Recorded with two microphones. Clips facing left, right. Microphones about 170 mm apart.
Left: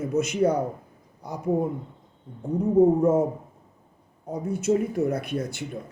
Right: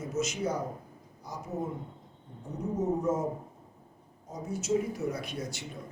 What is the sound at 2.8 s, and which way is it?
Speech, 60° left (ahead or behind).